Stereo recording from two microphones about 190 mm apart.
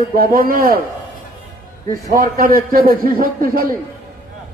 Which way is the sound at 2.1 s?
50° right (ahead or behind).